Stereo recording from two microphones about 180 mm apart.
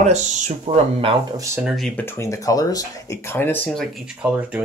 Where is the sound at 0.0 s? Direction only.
40° right (ahead or behind).